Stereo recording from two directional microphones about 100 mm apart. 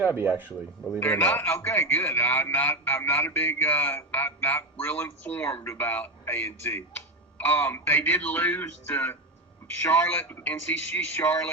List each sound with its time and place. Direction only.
0.0 s speech: 20° right (ahead or behind)
0.9 s a man's voice: 20° left (ahead or behind)